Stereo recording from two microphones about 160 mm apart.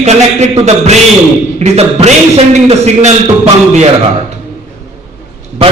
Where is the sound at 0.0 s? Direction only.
45° right (ahead or behind).